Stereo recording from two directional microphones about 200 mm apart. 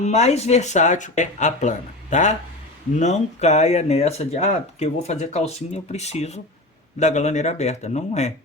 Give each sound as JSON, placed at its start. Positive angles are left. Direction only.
{"t": 0.0, "sound": "speech", "side_deg": 35}